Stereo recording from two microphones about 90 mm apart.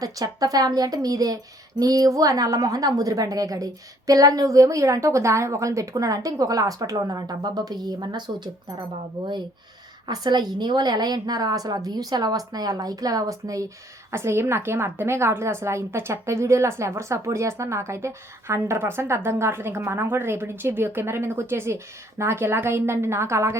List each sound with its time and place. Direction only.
0.0 s a woman's voice: 40° right (ahead or behind)
10.1 s a woman's voice: 50° right (ahead or behind); by 23.6 s 30° right (ahead or behind)